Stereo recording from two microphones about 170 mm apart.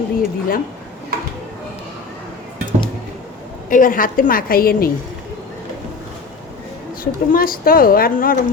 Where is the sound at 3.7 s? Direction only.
55° left (ahead or behind).